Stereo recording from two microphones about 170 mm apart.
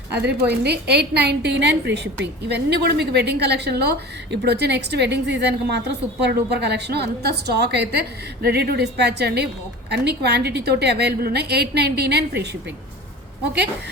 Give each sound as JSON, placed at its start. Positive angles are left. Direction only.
{"t": 0.1, "sound": "a woman's voice", "side_deg": -75}